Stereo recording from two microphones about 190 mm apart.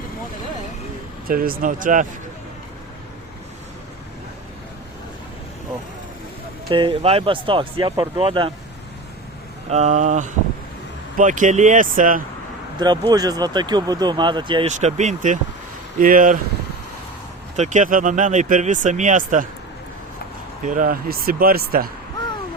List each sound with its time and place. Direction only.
1.3 s speech: 50° right (ahead or behind)
6.7 s speech: 25° right (ahead or behind)
9.6 s speech: 35° right (ahead or behind)
12.8 s speech: 20° right (ahead or behind)
14.7 s speech: 40° right (ahead or behind)
17.6 s speech: 40° right (ahead or behind)
20.7 s speech: 45° right (ahead or behind)